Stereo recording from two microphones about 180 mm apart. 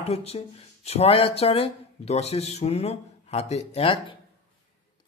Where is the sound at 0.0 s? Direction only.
35° left (ahead or behind).